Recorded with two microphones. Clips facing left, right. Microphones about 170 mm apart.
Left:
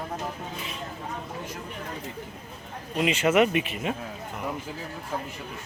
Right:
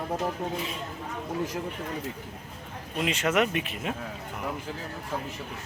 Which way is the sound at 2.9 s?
Centre (ahead or behind).